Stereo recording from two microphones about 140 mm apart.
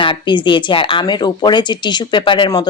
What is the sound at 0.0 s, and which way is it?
Speech, 35° left (ahead or behind).